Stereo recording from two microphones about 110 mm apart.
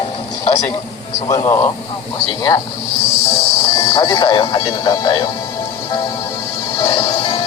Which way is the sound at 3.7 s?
50° left (ahead or behind).